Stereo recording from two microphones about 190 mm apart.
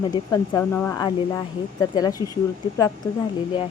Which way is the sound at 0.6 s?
10° left (ahead or behind).